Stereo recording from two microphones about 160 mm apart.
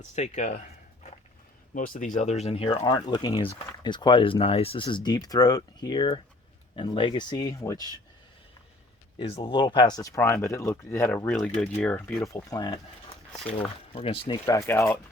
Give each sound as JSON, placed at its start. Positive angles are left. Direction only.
{"t": 0.0, "sound": "speech", "side_deg": 50}
{"t": 2.6, "sound": "speech", "side_deg": 25}
{"t": 9.1, "sound": "speech", "side_deg": 35}
{"t": 14.4, "sound": "speech", "side_deg": 20}